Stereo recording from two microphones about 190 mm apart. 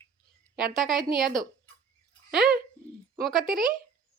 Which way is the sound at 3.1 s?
Centre (ahead or behind).